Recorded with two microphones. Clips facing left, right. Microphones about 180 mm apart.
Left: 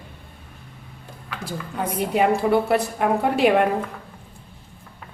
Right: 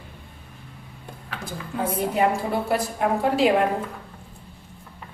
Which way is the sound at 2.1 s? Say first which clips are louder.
Left 6 dB; 70° left (ahead or behind).